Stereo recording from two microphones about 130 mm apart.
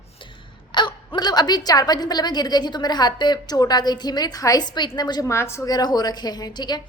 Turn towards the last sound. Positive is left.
turn(degrees=35)  # may be behind; listen again after turning